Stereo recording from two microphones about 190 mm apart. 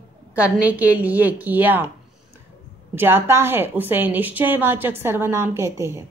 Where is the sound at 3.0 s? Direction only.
10° right (ahead or behind).